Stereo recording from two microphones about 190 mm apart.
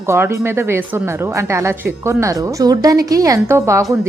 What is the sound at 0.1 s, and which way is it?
Speech, 15° right (ahead or behind).